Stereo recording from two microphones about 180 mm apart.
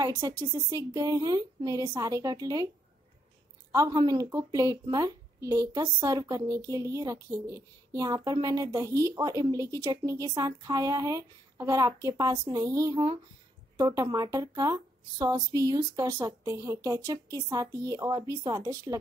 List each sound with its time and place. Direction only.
0.0 s a woman's voice: 15° right (ahead or behind)
3.7 s a woman's voice: 20° right (ahead or behind)